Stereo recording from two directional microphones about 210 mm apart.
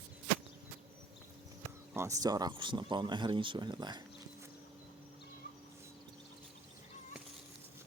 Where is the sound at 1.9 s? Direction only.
15° right (ahead or behind).